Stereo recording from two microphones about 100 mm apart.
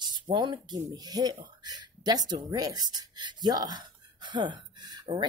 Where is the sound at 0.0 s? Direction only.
50° right (ahead or behind).